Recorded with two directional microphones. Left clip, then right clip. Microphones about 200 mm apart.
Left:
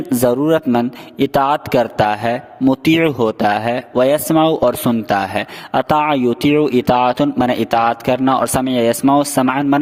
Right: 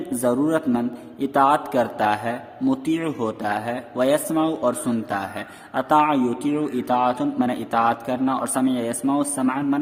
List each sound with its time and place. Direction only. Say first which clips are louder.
0.2 s a man's voice: left 7 dB; 45° left (ahead or behind)